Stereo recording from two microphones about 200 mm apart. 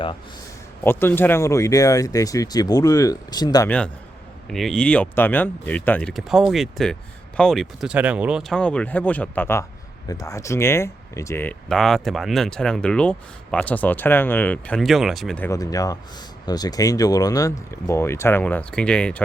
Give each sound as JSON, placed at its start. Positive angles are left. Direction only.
{"t": 0.9, "sound": "speech", "side_deg": 10}
{"t": 4.4, "sound": "speech", "side_deg": 0}
{"t": 15.4, "sound": "speech", "side_deg": 15}